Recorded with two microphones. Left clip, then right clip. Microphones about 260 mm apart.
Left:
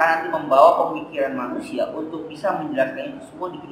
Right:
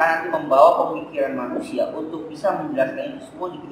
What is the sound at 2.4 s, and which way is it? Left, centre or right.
A man's voice, centre.